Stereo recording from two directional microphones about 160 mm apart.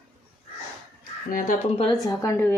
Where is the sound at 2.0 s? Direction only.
20° left (ahead or behind).